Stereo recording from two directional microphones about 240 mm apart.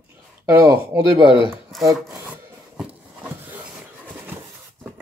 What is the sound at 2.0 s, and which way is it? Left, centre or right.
Rub, centre.